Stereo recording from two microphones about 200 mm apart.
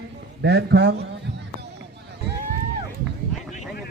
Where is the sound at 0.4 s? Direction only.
55° right (ahead or behind).